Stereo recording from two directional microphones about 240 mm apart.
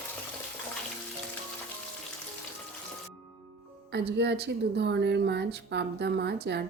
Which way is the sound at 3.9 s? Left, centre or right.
Right.